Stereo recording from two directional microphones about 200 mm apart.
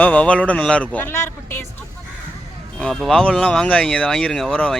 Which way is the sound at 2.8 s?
5° left (ahead or behind).